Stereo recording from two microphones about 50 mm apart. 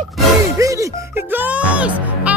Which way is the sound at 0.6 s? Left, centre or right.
Right.